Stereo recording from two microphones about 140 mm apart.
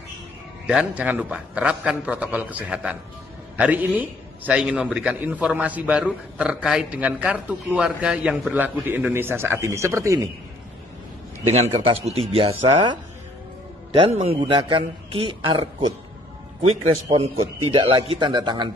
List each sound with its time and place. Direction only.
0.7 s a man's voice: 10° right (ahead or behind)
11.5 s a man's voice: 45° right (ahead or behind)
14.1 s a man's voice: 45° right (ahead or behind)
14.4 s a man's voice: 35° right (ahead or behind)
16.8 s a man's voice: 45° right (ahead or behind)